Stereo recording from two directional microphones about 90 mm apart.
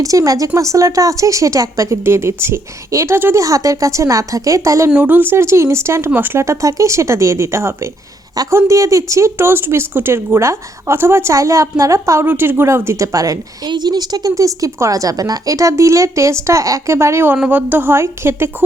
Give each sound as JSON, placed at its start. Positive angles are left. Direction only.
{"t": 0.0, "sound": "speech", "side_deg": -40}
{"t": 3.4, "sound": "speech", "side_deg": -40}
{"t": 4.9, "sound": "speech", "side_deg": -20}
{"t": 13.7, "sound": "speech", "side_deg": -50}